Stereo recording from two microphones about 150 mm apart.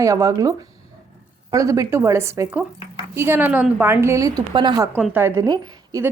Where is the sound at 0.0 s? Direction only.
20° right (ahead or behind).